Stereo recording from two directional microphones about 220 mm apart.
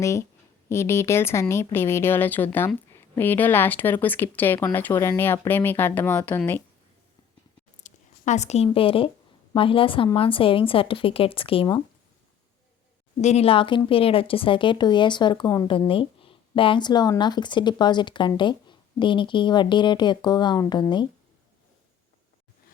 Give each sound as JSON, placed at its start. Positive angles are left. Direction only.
{"t": 0.0, "sound": "speech", "side_deg": 15}
{"t": 7.9, "sound": "a woman's voice", "side_deg": 35}
{"t": 13.1, "sound": "speech", "side_deg": 30}